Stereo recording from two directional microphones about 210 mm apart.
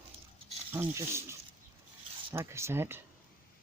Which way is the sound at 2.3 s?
10° right (ahead or behind).